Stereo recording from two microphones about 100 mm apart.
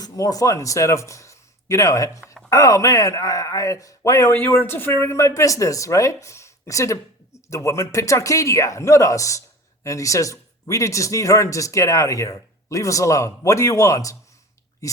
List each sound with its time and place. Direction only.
0.0 s speech: 35° left (ahead or behind)
4.3 s speech: 20° left (ahead or behind)